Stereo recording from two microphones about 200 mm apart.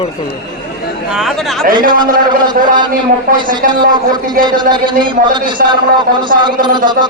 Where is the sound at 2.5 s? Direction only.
45° right (ahead or behind).